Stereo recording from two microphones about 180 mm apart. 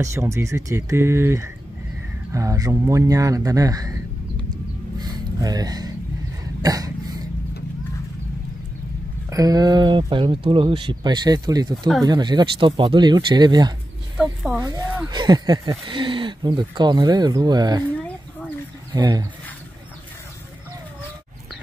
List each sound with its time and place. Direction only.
0.0 s speech: 15° right (ahead or behind)
4.9 s a sound: 25° right (ahead or behind)
6.6 s cough: 20° right (ahead or behind)
9.3 s speech: 20° right (ahead or behind)
14.1 s speech: 5° right (ahead or behind)
14.6 s speech: 20° right (ahead or behind)
18.9 s speech: 20° right (ahead or behind)